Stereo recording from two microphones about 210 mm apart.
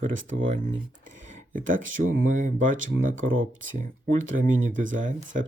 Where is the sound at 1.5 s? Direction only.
40° right (ahead or behind).